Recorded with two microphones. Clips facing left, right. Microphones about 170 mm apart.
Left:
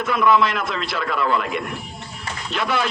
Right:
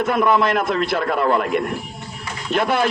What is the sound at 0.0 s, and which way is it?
A man's voice, 50° right (ahead or behind).